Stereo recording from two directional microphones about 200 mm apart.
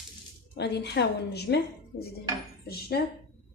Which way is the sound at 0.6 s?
55° left (ahead or behind).